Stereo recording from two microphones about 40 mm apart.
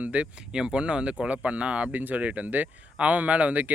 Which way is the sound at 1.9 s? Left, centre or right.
Right.